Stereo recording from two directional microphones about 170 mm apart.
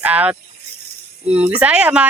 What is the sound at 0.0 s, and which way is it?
Speech, 10° right (ahead or behind).